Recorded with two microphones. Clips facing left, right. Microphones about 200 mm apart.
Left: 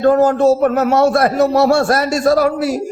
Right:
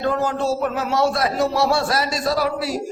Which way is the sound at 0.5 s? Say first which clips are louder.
Left 8 dB; 55° left (ahead or behind).